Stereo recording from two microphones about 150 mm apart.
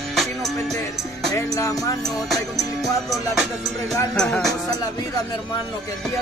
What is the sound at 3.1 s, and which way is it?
Music, centre (ahead or behind).